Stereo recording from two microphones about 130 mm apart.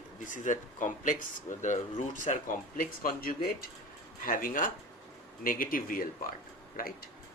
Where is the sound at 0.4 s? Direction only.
80° left.